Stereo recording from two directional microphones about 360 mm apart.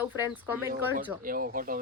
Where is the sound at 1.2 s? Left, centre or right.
Right.